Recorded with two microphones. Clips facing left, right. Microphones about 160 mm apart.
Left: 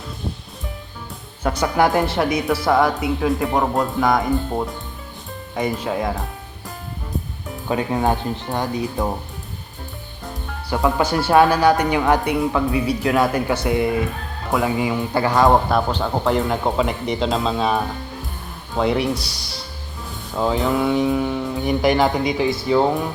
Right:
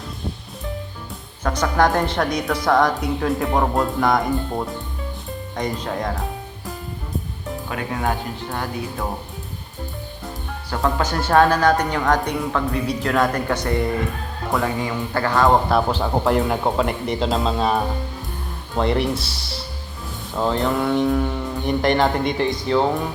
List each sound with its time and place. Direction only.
1.5 s speech: 10° left (ahead or behind)
7.7 s speech: 20° left (ahead or behind)
10.8 s speech: 10° left (ahead or behind)
15.7 s speech: 5° right (ahead or behind)
18.8 s speech: centre (ahead or behind)